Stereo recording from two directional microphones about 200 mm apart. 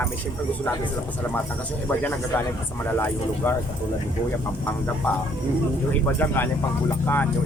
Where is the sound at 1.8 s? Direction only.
10° left (ahead or behind).